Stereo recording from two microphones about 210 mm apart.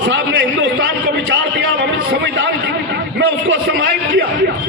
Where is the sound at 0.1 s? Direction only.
60° right (ahead or behind).